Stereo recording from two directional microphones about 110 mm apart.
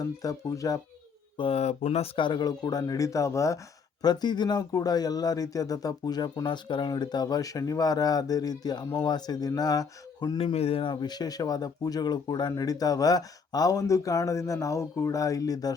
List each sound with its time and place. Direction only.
0.0 s speech: 35° left (ahead or behind)
1.4 s speech: 65° left (ahead or behind)
2.1 s speech: 45° left (ahead or behind); by 3.6 s 30° left (ahead or behind)
4.0 s speech: 40° left (ahead or behind)
10.3 s speech: 65° left (ahead or behind)
11.0 s speech: 40° left (ahead or behind)